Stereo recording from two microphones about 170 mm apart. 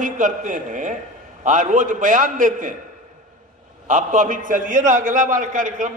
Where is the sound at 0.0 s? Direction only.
50° right (ahead or behind).